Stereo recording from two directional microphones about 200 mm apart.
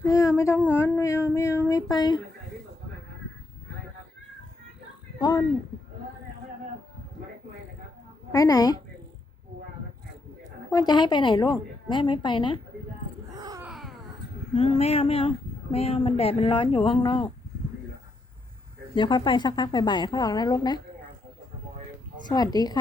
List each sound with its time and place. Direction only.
0.0 s a sound: 15° left (ahead or behind)
0.3 s speech: 15° left (ahead or behind)
8.3 s a woman's voice: 20° left (ahead or behind)
10.7 s a woman's voice: 20° left (ahead or behind)
13.3 s a sound: 20° right (ahead or behind)
13.7 s a sound: centre (ahead or behind)
14.5 s a woman's voice: 30° left (ahead or behind)
18.9 s a woman's voice: 25° left (ahead or behind)
22.5 s a woman's voice: 20° left (ahead or behind)